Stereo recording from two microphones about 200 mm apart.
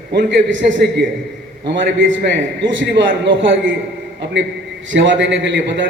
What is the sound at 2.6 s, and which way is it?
A man's voice, 60° right (ahead or behind).